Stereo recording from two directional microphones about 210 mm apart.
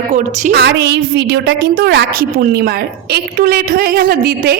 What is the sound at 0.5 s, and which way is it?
A woman's voice, 55° right (ahead or behind).